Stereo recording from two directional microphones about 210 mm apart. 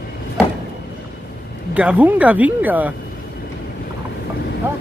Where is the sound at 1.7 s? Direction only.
5° right (ahead or behind).